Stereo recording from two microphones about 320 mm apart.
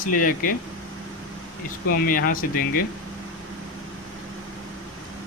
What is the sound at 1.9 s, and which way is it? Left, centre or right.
Speech, left.